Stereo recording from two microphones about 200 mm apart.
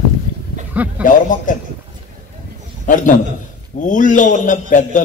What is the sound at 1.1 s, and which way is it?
Speech, 40° left (ahead or behind).